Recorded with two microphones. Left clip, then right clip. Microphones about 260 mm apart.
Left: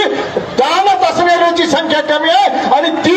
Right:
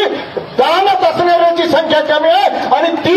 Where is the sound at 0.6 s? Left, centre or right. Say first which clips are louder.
Even; left.